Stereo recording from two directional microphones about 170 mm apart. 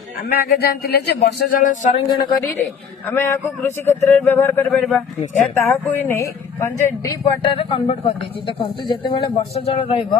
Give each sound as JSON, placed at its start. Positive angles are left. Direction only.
{"t": 0.3, "sound": "speech", "side_deg": 65}
{"t": 2.0, "sound": "speech", "side_deg": 25}
{"t": 3.1, "sound": "a man's voice", "side_deg": 15}
{"t": 5.5, "sound": "a man's voice", "side_deg": 15}
{"t": 7.4, "sound": "speech", "side_deg": 35}